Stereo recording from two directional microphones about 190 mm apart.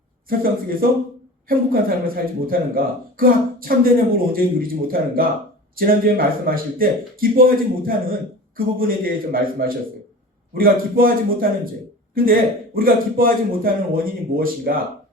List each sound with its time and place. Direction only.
1.5 s speech: 50° right (ahead or behind)